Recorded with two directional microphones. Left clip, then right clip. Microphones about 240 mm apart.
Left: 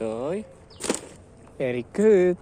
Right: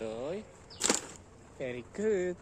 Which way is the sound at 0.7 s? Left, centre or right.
Centre.